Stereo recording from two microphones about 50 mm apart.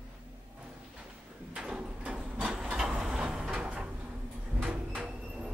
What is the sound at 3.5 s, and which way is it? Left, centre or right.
Cupboard open or close, right.